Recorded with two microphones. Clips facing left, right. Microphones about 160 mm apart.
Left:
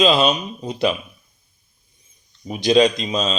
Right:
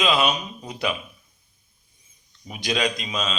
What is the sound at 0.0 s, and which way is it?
Speech, 30° left (ahead or behind).